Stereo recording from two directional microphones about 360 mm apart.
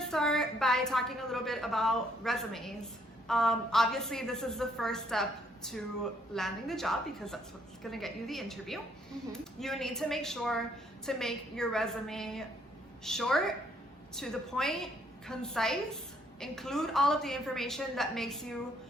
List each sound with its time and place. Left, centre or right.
0.0 s a woman's voice: centre